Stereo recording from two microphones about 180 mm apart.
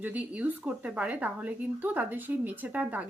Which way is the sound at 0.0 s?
10° right (ahead or behind).